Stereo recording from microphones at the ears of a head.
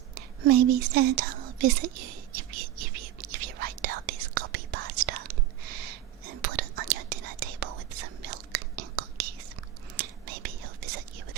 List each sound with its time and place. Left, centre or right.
0.1 s whispering: right